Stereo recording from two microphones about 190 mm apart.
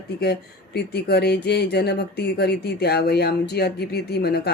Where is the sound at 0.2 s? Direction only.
60° left (ahead or behind).